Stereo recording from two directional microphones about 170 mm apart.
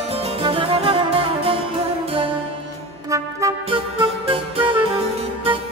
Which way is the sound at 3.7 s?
30° right (ahead or behind).